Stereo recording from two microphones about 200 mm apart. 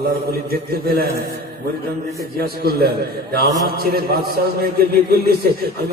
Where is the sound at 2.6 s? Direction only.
50° right (ahead or behind).